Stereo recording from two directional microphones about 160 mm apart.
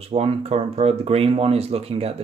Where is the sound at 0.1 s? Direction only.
40° right (ahead or behind).